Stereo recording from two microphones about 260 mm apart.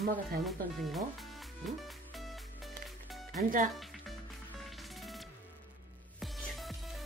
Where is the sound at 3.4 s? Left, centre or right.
Right.